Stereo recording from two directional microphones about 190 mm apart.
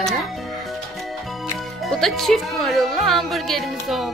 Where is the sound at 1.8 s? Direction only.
Centre (ahead or behind).